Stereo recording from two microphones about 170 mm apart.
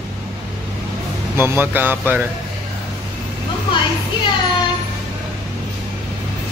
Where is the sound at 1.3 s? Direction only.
15° right (ahead or behind).